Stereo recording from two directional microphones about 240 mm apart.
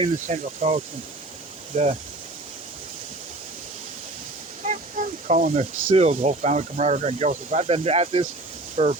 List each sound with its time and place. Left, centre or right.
0.0 s speech: right
4.6 s speech: right